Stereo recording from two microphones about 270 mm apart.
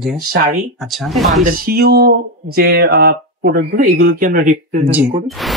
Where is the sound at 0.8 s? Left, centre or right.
Centre.